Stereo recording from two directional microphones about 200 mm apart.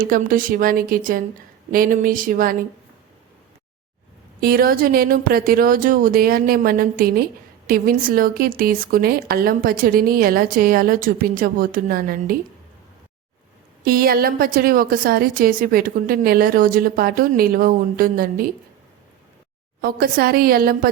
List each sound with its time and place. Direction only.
0.0 s speech: 45° right (ahead or behind)
4.4 s speech: 50° right (ahead or behind)
13.8 s speech: 45° right (ahead or behind)
19.8 s speech: 50° right (ahead or behind)